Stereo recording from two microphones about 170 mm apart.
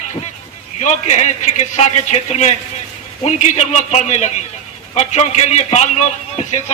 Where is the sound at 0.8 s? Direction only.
45° left (ahead or behind).